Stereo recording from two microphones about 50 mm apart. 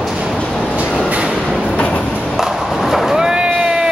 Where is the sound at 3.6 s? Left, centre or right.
Centre.